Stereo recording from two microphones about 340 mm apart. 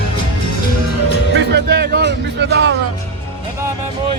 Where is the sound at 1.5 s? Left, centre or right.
Right.